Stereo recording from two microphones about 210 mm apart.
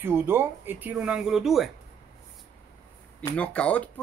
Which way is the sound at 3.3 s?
5° left (ahead or behind).